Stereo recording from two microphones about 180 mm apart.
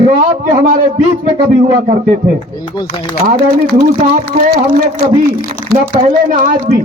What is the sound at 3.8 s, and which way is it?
Speech, 45° right (ahead or behind).